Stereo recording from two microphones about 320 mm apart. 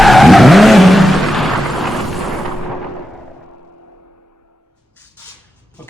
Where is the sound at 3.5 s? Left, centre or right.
Left.